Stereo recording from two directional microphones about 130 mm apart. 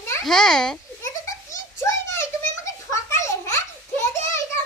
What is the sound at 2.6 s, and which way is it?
Children playing, 20° left (ahead or behind).